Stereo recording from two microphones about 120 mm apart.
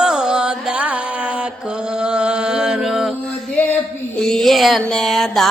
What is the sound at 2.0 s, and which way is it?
Music, 10° right (ahead or behind).